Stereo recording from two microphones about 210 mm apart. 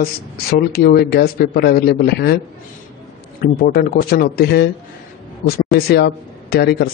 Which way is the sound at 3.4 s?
45° left (ahead or behind).